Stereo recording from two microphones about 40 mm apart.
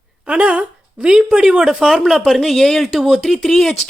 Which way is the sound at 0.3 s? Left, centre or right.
Right.